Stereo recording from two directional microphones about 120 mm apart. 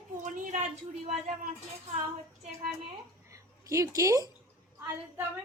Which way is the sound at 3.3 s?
25° right (ahead or behind).